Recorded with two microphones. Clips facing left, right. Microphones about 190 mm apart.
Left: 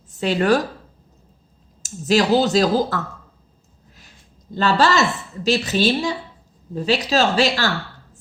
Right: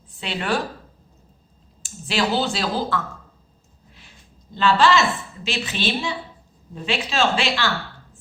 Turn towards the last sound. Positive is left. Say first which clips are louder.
# left 3 dB
turn(degrees=40)  # may be behind; listen again after turning